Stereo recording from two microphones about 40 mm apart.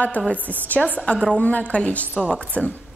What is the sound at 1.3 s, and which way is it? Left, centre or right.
A woman's voice, left.